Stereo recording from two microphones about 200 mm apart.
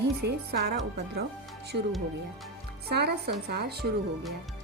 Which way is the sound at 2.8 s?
55° right (ahead or behind).